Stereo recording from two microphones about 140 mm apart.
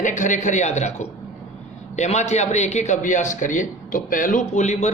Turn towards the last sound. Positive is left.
turn(degrees=55)  # may be behind; listen again after turning